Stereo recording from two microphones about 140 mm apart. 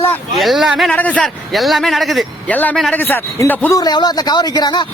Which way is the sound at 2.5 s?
10° left (ahead or behind).